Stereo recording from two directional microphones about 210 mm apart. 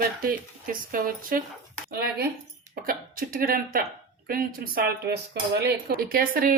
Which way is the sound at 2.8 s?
40° right (ahead or behind).